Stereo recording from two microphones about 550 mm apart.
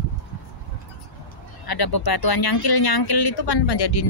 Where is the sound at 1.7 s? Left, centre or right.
Left.